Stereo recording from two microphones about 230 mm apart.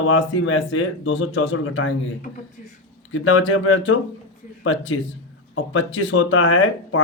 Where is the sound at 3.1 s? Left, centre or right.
Left.